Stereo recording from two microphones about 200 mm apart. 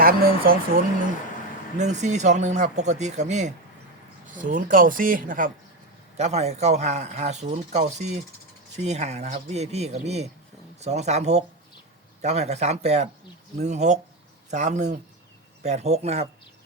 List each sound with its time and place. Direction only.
0.0 s speech: 50° right (ahead or behind)
1.8 s speech: 35° right (ahead or behind)